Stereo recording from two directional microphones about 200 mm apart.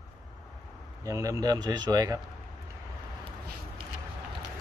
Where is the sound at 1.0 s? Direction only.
15° right (ahead or behind).